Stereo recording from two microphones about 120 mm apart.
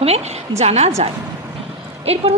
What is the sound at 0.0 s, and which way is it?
A woman's voice, 60° right (ahead or behind).